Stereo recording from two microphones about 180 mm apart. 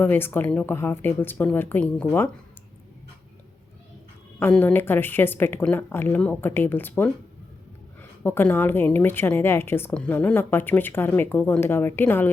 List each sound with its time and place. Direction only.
0.0 s a woman's voice: 10° left (ahead or behind)
4.4 s a woman's voice: 10° left (ahead or behind)
8.2 s a woman's voice: 10° left (ahead or behind)